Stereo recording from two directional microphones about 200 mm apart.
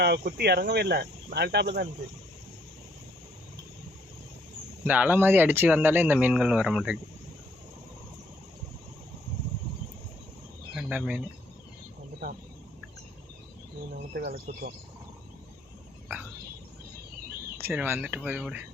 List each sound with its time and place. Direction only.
0.0 s speech: 55° right (ahead or behind)
4.9 s speech: 10° right (ahead or behind)
10.8 s speech: 5° right (ahead or behind)
14.1 s speech: 50° right (ahead or behind)
17.6 s speech: 10° right (ahead or behind)